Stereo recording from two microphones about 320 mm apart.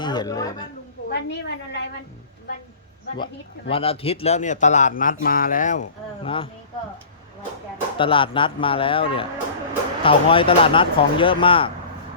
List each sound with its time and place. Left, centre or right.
0.0 s speech: centre
1.1 s a woman's voice: left
3.7 s speech: centre
7.9 s speech: centre